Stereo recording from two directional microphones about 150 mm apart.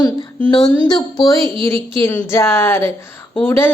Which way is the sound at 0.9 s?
30° left (ahead or behind).